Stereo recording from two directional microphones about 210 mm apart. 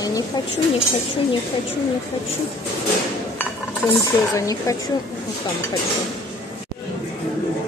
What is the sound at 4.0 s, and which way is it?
Speech, 15° left (ahead or behind).